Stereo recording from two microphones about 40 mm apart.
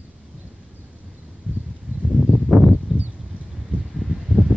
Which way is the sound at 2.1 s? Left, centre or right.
Centre.